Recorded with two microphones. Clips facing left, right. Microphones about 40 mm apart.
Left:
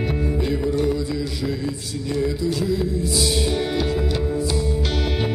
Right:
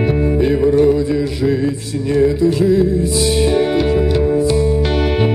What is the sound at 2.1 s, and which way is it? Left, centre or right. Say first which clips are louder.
Music: right 10 dB; right.